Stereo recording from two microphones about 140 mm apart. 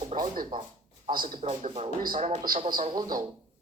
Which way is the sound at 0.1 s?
65° right (ahead or behind).